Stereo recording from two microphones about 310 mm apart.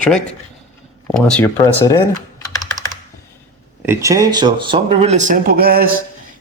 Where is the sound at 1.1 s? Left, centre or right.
Centre.